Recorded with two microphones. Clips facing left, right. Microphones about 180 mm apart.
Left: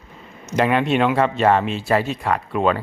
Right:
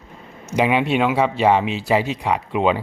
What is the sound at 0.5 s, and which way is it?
Speech, 10° right (ahead or behind).